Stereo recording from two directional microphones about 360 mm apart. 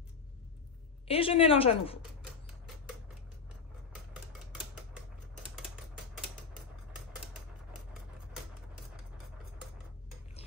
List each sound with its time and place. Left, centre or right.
1.0 s a woman's voice: centre